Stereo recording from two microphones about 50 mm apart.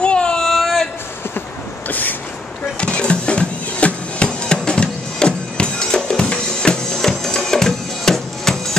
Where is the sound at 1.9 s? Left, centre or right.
Left.